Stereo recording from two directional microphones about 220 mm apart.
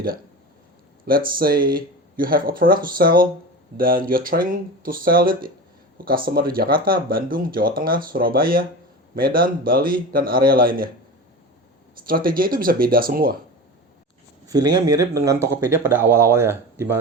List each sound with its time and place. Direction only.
1.0 s speech: 40° right (ahead or behind)
12.0 s speech: 40° right (ahead or behind)
14.4 s speech: 20° right (ahead or behind)